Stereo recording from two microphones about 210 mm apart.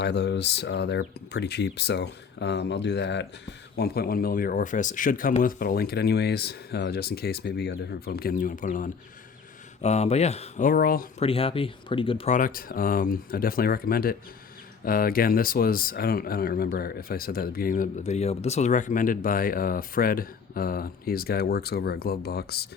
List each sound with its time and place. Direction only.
0.0 s speech: 55° left (ahead or behind)
11.2 s speech: 25° left (ahead or behind); by 22.7 s 50° left (ahead or behind)